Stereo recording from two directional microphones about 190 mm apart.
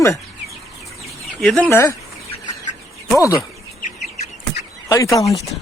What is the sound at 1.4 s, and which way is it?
Speech, 5° left (ahead or behind).